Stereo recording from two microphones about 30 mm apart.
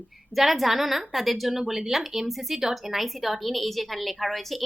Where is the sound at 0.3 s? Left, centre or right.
Centre.